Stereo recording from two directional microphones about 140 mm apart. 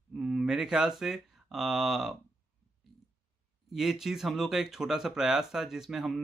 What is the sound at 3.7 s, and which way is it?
Speech, 5° right (ahead or behind).